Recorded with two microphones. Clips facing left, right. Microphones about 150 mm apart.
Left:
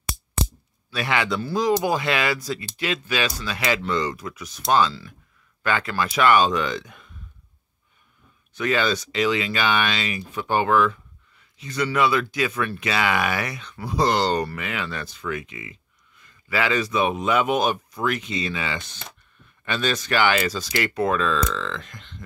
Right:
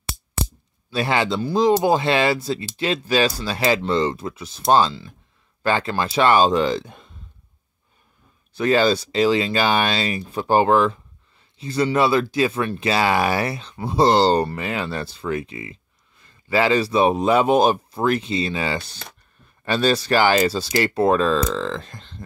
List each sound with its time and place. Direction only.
0.9 s speech: 30° right (ahead or behind)
8.5 s speech: 35° right (ahead or behind)